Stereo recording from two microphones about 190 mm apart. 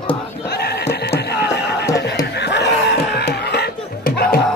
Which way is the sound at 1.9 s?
65° left (ahead or behind).